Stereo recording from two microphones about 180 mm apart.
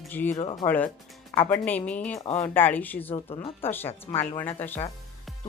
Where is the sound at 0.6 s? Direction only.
30° left (ahead or behind).